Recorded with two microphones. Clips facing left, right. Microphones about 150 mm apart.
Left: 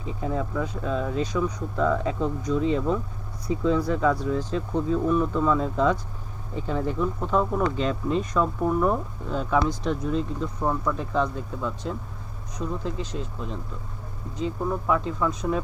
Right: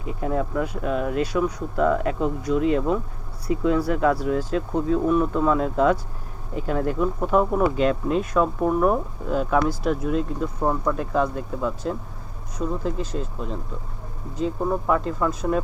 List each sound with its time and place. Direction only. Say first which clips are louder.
0.3 s speech: right 3 dB; 15° right (ahead or behind)
10.6 s speech: right 3 dB; 15° right (ahead or behind)
10.9 s speech: right 3 dB; 5° right (ahead or behind)
14.8 s speech: even; centre (ahead or behind)